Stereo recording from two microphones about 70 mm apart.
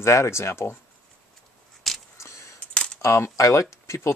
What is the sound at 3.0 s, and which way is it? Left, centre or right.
Speech, left.